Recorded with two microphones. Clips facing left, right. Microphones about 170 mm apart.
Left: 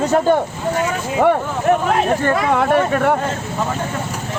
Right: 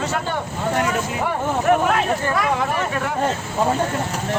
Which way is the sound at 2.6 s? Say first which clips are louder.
Left 7 dB; 60° left (ahead or behind).